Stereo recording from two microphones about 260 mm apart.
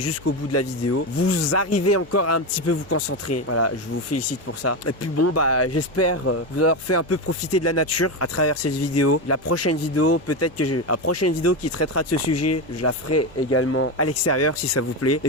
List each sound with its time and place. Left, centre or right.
0.0 s speech: left